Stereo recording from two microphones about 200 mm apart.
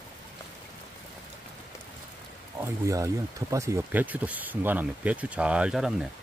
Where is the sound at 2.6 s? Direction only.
15° right (ahead or behind).